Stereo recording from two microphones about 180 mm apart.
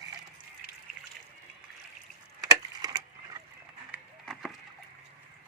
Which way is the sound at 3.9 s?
Centre (ahead or behind).